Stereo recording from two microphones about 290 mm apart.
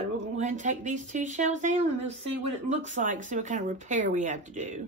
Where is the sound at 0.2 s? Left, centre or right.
Right.